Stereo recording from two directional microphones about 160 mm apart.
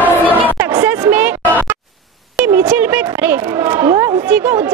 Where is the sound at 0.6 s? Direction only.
15° right (ahead or behind).